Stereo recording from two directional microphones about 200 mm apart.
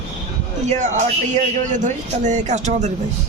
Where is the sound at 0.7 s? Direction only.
35° right (ahead or behind).